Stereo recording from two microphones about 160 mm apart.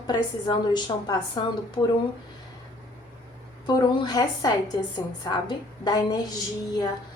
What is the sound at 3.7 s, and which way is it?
A woman's voice, 25° left (ahead or behind).